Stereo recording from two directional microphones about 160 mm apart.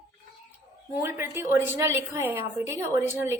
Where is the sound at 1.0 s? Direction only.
15° right (ahead or behind).